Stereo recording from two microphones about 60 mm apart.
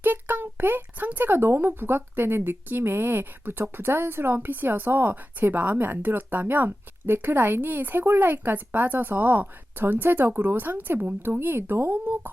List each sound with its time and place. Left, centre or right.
0.0 s a woman's voice: right